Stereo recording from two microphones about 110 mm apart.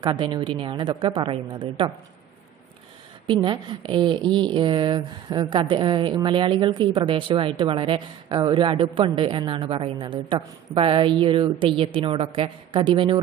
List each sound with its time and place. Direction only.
0.0 s a woman's voice: 45° right (ahead or behind)
3.3 s a woman's voice: 50° right (ahead or behind)